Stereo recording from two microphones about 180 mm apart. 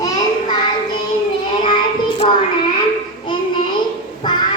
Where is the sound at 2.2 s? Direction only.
35° left (ahead or behind).